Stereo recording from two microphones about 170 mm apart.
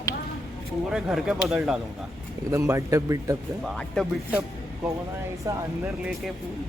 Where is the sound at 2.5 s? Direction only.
15° right (ahead or behind).